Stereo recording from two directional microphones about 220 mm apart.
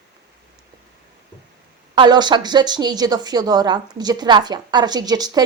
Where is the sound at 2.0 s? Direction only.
20° right (ahead or behind).